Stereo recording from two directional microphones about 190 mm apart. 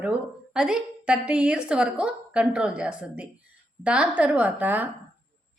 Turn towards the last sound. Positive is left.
turn(degrees=-10)  # may be behind; listen again after turning